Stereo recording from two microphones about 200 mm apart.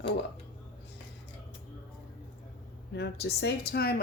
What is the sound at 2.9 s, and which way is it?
A woman's voice, 55° left (ahead or behind).